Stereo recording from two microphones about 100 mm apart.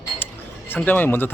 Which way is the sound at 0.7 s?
20° left (ahead or behind).